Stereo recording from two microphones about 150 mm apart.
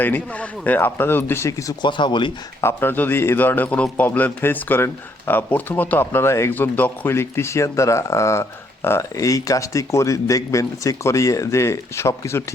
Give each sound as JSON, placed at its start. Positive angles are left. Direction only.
{"t": 0.0, "sound": "a man's voice", "side_deg": 10}
{"t": 2.6, "sound": "a man's voice", "side_deg": 15}